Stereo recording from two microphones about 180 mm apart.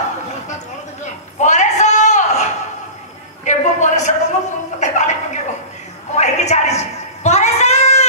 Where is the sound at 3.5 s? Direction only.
40° left (ahead or behind).